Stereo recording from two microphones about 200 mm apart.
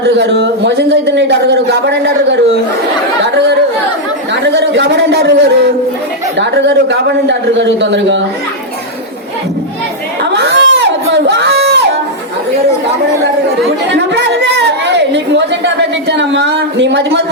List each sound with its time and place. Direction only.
0.0 s a woman's voice: 55° right (ahead or behind)
4.4 s a woman's voice: 60° right (ahead or behind)
10.3 s crowd: 60° right (ahead or behind)
13.9 s chatter: 60° right (ahead or behind)
15.6 s a woman's voice: 60° right (ahead or behind)